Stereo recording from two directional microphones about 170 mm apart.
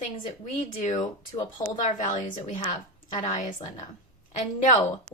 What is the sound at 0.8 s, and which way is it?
A woman's voice, 50° left (ahead or behind).